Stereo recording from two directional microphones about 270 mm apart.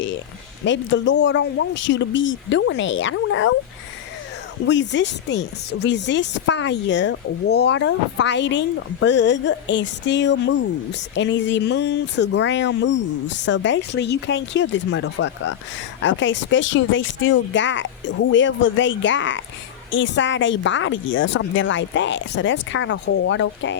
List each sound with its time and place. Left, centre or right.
0.6 s speech: left
4.6 s speech: left